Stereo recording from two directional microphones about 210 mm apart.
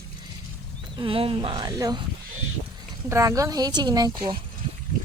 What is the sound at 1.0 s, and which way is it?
Speech, 25° right (ahead or behind).